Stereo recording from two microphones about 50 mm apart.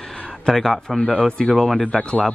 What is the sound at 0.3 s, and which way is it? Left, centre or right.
A man's voice, centre.